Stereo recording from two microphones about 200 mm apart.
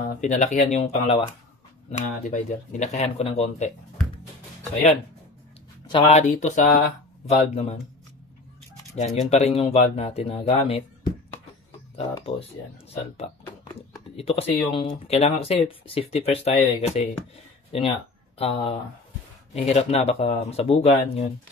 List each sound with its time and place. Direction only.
0.2 s speech: 35° left (ahead or behind)
5.9 s speech: 30° left (ahead or behind)
8.9 s speech: 35° left (ahead or behind)
12.0 s speech: 30° left (ahead or behind)